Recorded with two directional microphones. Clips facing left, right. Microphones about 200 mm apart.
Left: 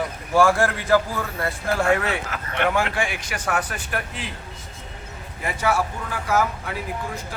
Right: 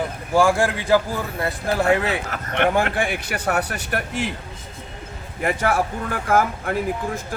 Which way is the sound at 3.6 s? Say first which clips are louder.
Right 3 dB; 70° right (ahead or behind).